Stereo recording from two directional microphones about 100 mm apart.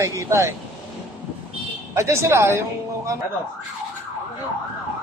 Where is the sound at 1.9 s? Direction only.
25° right (ahead or behind).